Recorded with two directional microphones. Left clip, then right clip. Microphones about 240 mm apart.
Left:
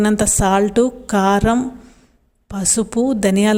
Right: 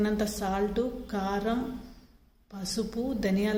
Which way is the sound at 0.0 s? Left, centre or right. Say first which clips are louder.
Left 13 dB; left.